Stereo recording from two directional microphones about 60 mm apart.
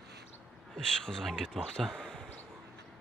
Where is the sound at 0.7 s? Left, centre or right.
Centre.